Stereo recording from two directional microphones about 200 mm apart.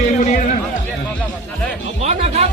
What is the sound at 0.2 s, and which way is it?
Run, 40° left (ahead or behind).